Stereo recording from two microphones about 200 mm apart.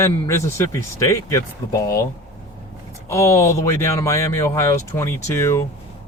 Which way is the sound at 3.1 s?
15° left (ahead or behind).